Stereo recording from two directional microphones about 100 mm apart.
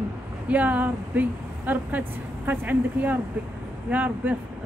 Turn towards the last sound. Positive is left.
turn(degrees=-15)  # may be behind; listen again after turning